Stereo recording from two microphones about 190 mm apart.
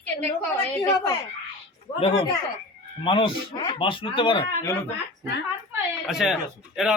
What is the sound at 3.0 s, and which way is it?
Speech, 25° left (ahead or behind).